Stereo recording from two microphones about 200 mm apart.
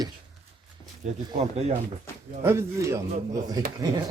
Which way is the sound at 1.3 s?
30° right (ahead or behind).